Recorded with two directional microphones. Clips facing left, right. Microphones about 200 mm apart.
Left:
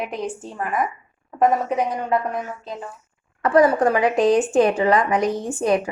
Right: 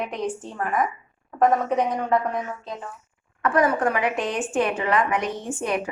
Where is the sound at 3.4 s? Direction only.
35° left (ahead or behind).